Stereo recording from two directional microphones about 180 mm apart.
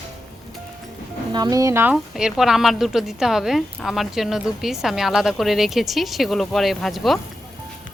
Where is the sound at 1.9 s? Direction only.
5° right (ahead or behind).